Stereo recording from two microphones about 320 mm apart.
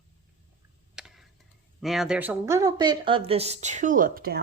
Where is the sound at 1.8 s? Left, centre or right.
Centre.